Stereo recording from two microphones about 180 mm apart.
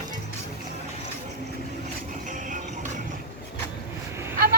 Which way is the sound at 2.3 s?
45° right (ahead or behind).